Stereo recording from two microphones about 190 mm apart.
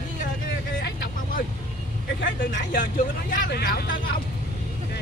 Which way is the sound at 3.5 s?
55° left (ahead or behind).